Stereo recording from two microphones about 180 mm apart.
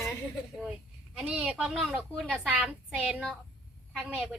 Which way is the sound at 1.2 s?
5° right (ahead or behind).